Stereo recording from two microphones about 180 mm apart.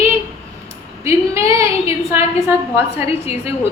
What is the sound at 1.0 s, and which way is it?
A woman's voice, 15° right (ahead or behind).